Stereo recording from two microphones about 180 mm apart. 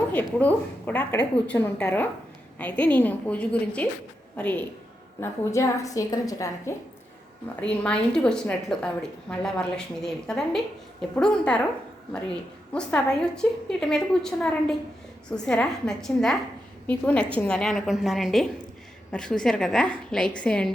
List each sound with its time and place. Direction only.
0.3 s a woman's voice: 10° left (ahead or behind)
7.6 s a woman's voice: 5° left (ahead or behind)
12.7 s a woman's voice: 5° left (ahead or behind)